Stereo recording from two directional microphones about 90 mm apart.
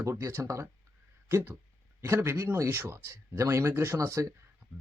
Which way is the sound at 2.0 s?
30° right (ahead or behind).